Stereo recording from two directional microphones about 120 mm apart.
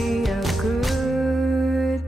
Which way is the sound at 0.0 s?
Centre (ahead or behind).